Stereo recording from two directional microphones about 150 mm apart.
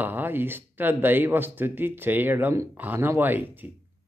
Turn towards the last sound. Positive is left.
turn(degrees=-10)  # may be behind; listen again after turning